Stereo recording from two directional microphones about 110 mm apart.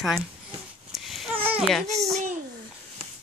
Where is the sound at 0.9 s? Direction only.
Centre (ahead or behind).